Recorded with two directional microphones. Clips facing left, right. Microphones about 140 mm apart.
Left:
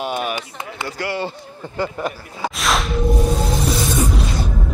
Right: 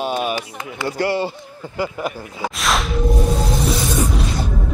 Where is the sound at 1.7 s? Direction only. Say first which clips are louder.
Even; 10° right (ahead or behind).